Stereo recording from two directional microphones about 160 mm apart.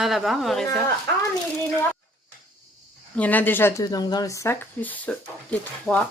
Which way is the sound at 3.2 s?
10° left (ahead or behind).